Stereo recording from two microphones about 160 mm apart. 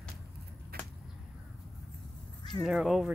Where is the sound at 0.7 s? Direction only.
75° right (ahead or behind).